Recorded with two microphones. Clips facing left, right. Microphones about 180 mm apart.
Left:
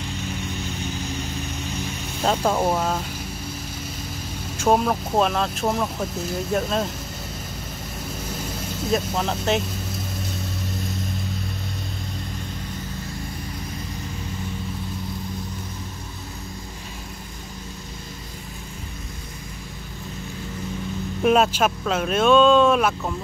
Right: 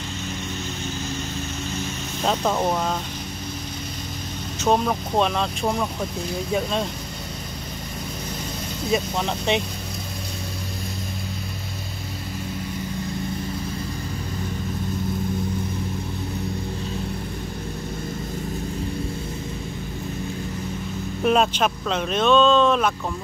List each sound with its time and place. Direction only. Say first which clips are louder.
2.2 s speech: left 1 dB; 10° left (ahead or behind)
4.6 s speech: left 1 dB; 5° left (ahead or behind)
8.8 s speech: even; centre (ahead or behind)
21.2 s speech: left 1 dB; 5° left (ahead or behind)